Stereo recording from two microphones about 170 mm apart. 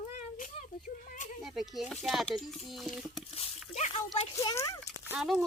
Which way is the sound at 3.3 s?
40° left (ahead or behind).